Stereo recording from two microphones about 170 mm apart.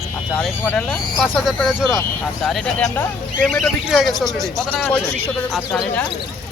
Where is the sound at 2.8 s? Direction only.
20° left (ahead or behind).